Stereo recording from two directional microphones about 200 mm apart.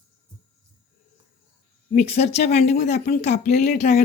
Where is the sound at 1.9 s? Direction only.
35° left (ahead or behind).